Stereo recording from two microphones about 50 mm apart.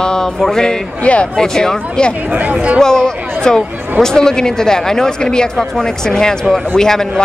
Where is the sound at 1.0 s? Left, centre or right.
Left.